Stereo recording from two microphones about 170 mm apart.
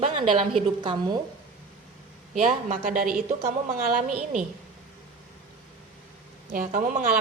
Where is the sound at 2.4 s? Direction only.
45° right (ahead or behind).